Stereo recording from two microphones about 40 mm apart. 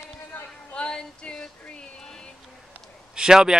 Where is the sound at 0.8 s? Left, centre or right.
Left.